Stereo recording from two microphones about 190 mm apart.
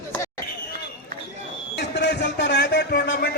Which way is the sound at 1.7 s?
60° left (ahead or behind).